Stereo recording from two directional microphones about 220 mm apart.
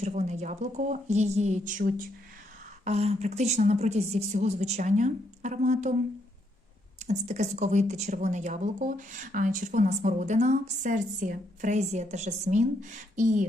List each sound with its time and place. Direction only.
0.0 s speech: 30° right (ahead or behind)
7.0 s speech: 30° right (ahead or behind)